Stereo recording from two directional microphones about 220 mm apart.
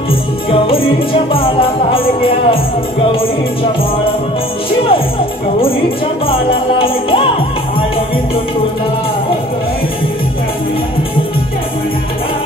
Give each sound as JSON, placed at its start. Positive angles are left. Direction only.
{"t": 0.1, "sound": "music", "side_deg": 25}
{"t": 6.2, "sound": "music", "side_deg": 25}